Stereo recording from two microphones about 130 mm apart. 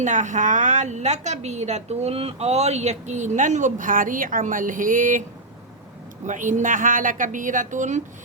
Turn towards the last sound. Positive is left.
turn(degrees=-75)  # may be behind; listen again after turning